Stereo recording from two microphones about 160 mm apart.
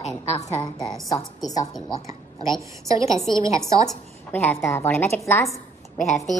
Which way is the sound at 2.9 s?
20° right (ahead or behind).